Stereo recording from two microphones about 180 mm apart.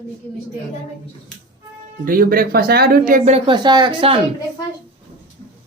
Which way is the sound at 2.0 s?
55° right (ahead or behind).